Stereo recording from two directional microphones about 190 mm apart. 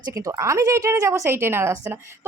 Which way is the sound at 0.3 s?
15° right (ahead or behind).